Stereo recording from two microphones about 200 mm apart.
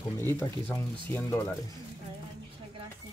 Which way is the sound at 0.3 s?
10° left (ahead or behind).